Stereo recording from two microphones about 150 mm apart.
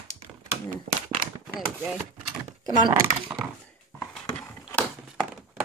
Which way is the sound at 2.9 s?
15° right (ahead or behind).